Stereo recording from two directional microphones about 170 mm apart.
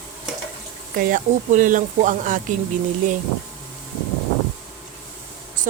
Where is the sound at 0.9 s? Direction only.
55° right (ahead or behind).